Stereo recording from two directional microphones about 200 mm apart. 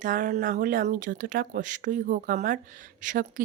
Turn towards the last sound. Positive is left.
turn(degrees=-40)  # may be behind; listen again after turning